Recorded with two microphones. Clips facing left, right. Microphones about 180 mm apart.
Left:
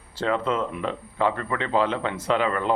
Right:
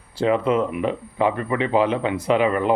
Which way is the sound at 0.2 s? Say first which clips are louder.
Right 5 dB; 15° right (ahead or behind).